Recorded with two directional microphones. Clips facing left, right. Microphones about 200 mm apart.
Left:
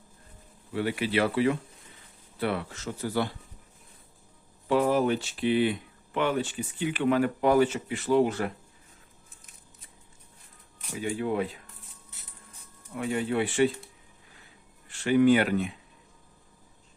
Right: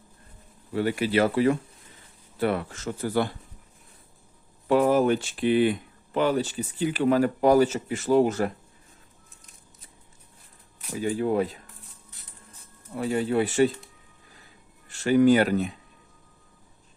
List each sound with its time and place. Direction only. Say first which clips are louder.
0.7 s speech: right 4 dB; 40° right (ahead or behind)
4.7 s speech: right 3 dB; 45° right (ahead or behind)
10.9 s speech: right 4 dB; 40° right (ahead or behind)
12.9 s speech: right 3 dB; 35° right (ahead or behind)
14.8 s speech: right 2 dB; 40° right (ahead or behind)